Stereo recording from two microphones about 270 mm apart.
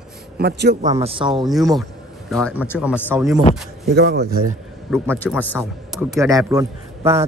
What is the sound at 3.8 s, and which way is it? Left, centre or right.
Speech, right.